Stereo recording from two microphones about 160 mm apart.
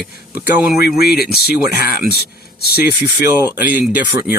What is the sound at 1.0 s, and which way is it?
Speech, 80° left.